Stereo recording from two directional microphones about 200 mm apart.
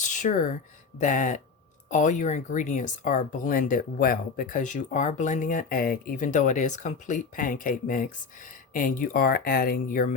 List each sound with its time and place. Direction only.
0.0 s speech: 40° left (ahead or behind)